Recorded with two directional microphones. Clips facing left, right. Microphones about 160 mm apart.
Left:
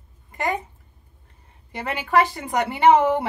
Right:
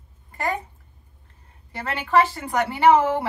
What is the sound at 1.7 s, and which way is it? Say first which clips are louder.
A woman's voice: even; 15° left (ahead or behind).